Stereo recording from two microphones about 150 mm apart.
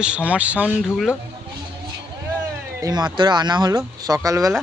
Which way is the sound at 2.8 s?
30° right (ahead or behind).